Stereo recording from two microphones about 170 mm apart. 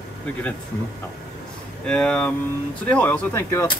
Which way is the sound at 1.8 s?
5° left (ahead or behind).